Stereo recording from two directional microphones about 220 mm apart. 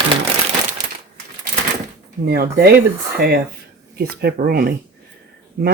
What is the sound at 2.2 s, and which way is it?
Speech, 45° right (ahead or behind).